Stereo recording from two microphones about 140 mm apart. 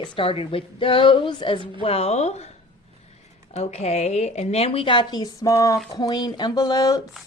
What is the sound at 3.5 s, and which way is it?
A woman's voice, 50° left (ahead or behind).